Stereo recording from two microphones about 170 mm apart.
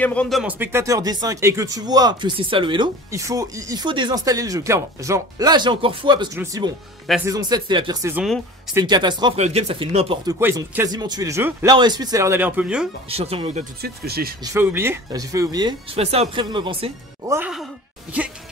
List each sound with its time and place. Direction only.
0.0 s speech: 5° left (ahead or behind)
0.4 s speech: 10° right (ahead or behind); by 2.9 s 30° right (ahead or behind)
3.1 s speech: 20° right (ahead or behind)
9.4 s speech: 40° right (ahead or behind)
10.2 s speech: 15° right (ahead or behind)
13.1 s speech: 35° right (ahead or behind)
13.7 s speech: 65° right (ahead or behind)
14.4 s speech: 15° right (ahead or behind)
16.0 s speech: 35° right (ahead or behind)